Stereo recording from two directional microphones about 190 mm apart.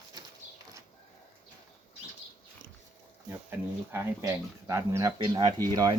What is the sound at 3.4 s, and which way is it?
Speech, 10° right (ahead or behind).